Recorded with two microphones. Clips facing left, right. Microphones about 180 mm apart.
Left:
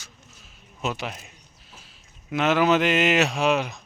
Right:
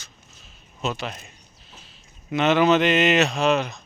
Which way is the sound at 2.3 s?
5° left (ahead or behind).